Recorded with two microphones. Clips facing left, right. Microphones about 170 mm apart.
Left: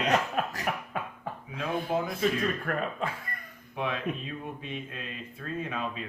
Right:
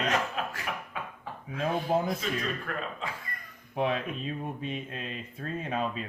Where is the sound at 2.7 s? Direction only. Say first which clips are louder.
Left 4 dB; 55° left (ahead or behind).